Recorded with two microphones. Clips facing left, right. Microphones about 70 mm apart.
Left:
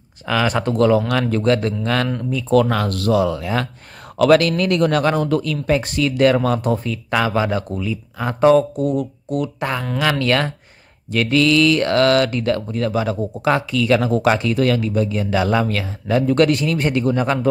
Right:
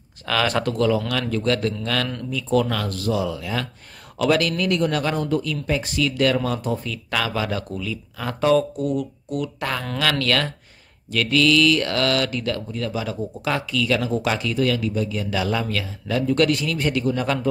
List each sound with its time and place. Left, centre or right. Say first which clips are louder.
0.3 s speech: left 3 dB; centre
0.7 s speech: left 5 dB; left
1.3 s speech: left 3 dB; left
2.5 s speech: left 5 dB; left
2.9 s a man's voice: left 6 dB; left
6.9 s speech: left 6 dB; left
9.6 s speech: left 3 dB; left